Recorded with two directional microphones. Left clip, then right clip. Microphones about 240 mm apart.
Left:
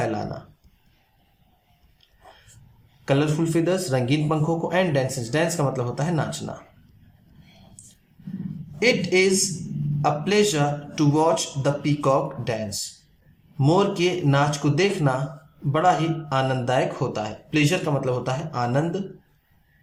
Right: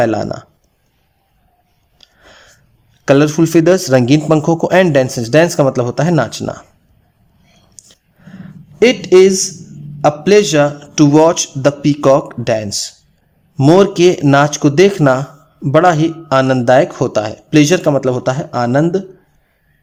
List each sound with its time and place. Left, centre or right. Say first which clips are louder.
0.0 s speech: right 12 dB; right
3.0 s speech: right 12 dB; right
8.8 s speech: right 11 dB; right